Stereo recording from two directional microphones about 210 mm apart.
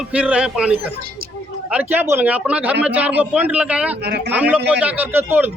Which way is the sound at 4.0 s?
50° right (ahead or behind).